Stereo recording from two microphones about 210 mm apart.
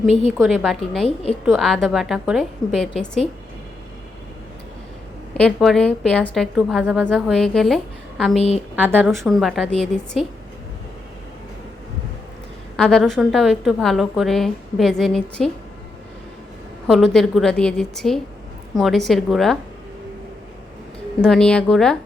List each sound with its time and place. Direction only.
0.1 s a woman's voice: 30° left (ahead or behind)
0.4 s a woman's voice: centre (ahead or behind)
5.3 s a woman's voice: 5° left (ahead or behind)
12.7 s a woman's voice: 5° left (ahead or behind)
16.8 s a woman's voice: centre (ahead or behind)
21.2 s a woman's voice: 5° left (ahead or behind)